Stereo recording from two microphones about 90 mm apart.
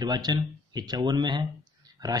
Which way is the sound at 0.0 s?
55° right (ahead or behind).